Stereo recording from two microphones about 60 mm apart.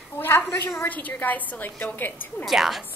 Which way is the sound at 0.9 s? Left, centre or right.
Left.